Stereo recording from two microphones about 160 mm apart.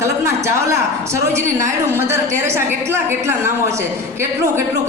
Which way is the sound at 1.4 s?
15° right (ahead or behind).